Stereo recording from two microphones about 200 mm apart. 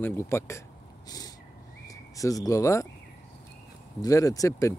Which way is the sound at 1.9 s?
15° left (ahead or behind).